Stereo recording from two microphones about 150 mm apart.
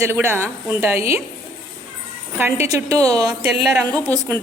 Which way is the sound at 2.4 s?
20° right (ahead or behind).